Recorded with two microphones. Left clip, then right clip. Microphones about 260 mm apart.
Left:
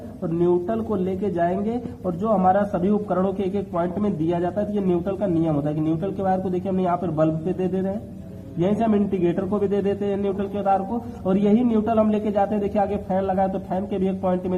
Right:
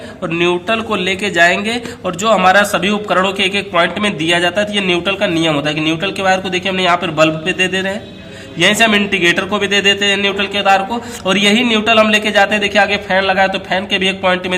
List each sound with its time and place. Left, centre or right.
0.3 s a man's voice: right